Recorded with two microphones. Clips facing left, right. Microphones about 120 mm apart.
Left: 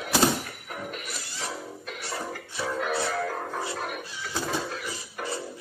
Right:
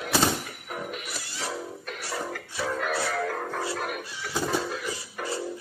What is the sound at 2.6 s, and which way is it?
Music, centre (ahead or behind).